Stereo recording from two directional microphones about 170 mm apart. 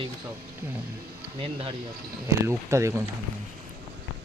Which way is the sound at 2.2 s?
15° right (ahead or behind).